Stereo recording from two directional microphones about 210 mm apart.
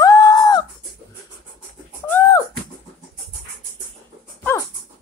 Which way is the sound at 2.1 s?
10° left (ahead or behind).